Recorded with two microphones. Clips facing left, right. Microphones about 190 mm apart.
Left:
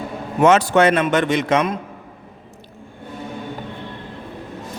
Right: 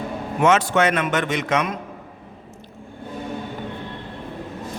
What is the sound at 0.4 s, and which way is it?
A man's voice, 35° left (ahead or behind).